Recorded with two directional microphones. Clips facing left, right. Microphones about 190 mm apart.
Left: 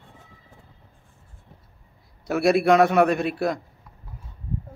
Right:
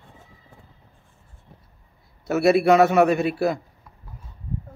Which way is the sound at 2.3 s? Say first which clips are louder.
Right 2 dB; centre (ahead or behind).